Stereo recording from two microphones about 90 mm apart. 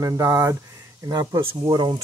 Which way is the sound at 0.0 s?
40° right (ahead or behind).